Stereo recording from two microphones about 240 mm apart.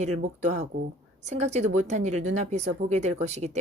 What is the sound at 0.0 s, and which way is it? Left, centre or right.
Speech, right.